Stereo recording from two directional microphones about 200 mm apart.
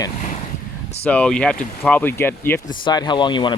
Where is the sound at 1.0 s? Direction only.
5° left (ahead or behind).